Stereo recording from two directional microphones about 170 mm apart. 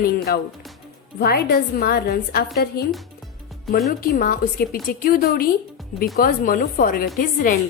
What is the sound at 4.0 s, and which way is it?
A woman's voice, 55° left (ahead or behind).